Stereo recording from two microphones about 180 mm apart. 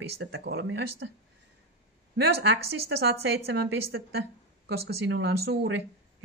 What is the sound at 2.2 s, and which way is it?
A woman's voice, 60° right (ahead or behind).